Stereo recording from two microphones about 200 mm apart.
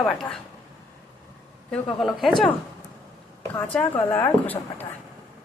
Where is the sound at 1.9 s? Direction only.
Centre (ahead or behind).